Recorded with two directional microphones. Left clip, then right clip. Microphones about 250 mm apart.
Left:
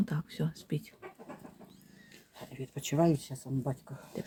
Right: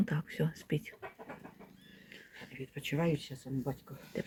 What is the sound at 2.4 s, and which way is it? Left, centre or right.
Speech, left.